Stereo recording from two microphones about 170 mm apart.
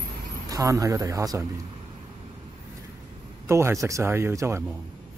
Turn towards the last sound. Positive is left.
turn(degrees=-15)  # may be behind; listen again after turning